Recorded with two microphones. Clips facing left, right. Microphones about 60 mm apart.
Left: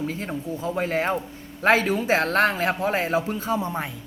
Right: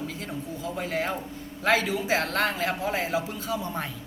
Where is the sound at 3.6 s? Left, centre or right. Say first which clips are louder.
Left 4 dB; left.